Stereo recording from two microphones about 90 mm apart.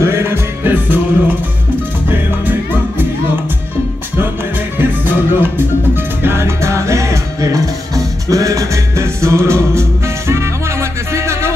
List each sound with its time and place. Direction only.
0.0 s music: 30° right (ahead or behind)
4.7 s music: 20° right (ahead or behind)